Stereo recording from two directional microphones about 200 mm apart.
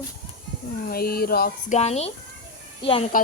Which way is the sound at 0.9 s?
50° left (ahead or behind).